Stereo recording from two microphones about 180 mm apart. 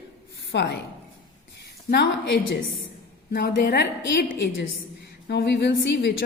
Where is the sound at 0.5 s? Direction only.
70° left (ahead or behind).